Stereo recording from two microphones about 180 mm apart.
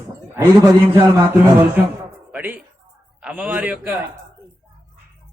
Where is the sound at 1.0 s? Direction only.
10° right (ahead or behind).